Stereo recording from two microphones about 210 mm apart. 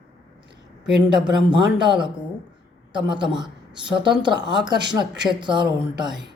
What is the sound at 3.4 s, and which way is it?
Speech, 20° right (ahead or behind).